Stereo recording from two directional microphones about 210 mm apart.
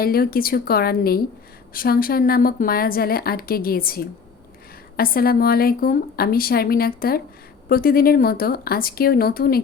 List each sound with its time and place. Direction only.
0.0 s a woman's voice: 45° left (ahead or behind)